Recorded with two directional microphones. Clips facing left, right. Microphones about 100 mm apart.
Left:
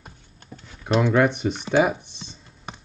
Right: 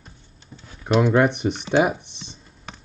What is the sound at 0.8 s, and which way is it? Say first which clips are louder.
Speech: right 1 dB; 5° right (ahead or behind).